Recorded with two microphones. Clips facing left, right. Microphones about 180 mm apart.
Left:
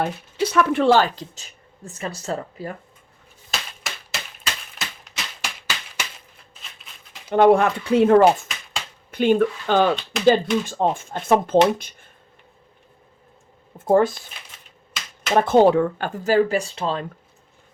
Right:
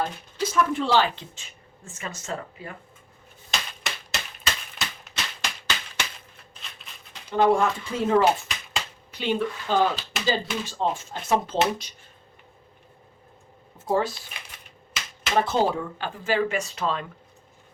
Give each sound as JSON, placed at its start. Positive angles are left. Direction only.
{"t": 0.0, "sound": "speech", "side_deg": 70}
{"t": 3.5, "sound": "typewriter", "side_deg": 0}
{"t": 5.1, "sound": "a sound", "side_deg": 10}
{"t": 7.3, "sound": "speech", "side_deg": 60}
{"t": 9.6, "sound": "speech", "side_deg": 70}
{"t": 9.9, "sound": "speech", "side_deg": -5}
{"t": 10.2, "sound": "speech", "side_deg": 55}
{"t": 13.7, "sound": "speech", "side_deg": 55}
{"t": 15.3, "sound": "speech", "side_deg": 55}
{"t": 16.0, "sound": "speech", "side_deg": 45}